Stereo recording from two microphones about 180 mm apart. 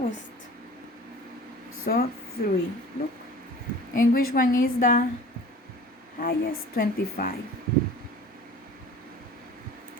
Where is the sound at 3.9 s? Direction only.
50° left (ahead or behind).